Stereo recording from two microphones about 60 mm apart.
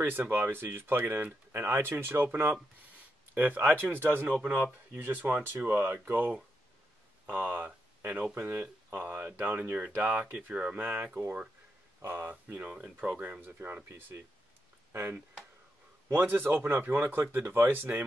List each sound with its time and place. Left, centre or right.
0.0 s speech: right
9.9 s speech: right
10.8 s speech: right
12.0 s speech: right
12.5 s speech: right
13.0 s speech: centre
13.4 s speech: right
14.9 s speech: right